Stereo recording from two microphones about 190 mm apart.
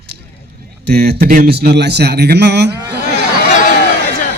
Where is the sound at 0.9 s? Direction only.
55° right (ahead or behind).